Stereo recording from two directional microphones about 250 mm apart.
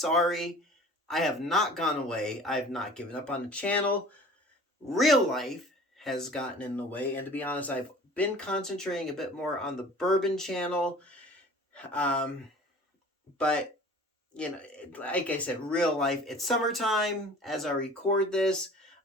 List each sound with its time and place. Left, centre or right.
0.0 s speech: centre
14.9 s speech: centre